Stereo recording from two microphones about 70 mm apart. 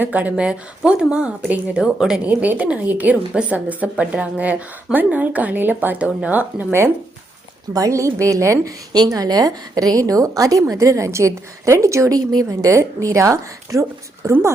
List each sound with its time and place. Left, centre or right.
0.0 s a woman's voice: right
2.4 s a woman's voice: right
7.7 s speech: right
8.9 s a woman's voice: right
12.1 s a woman's voice: right
12.7 s speech: right